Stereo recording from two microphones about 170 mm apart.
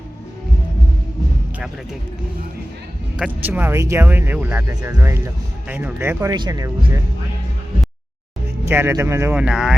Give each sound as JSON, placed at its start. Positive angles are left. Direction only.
{"t": 1.5, "sound": "speech", "side_deg": -5}
{"t": 3.2, "sound": "speech", "side_deg": -10}
{"t": 8.6, "sound": "speech", "side_deg": -15}